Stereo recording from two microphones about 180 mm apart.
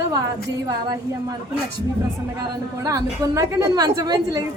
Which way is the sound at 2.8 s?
20° right (ahead or behind).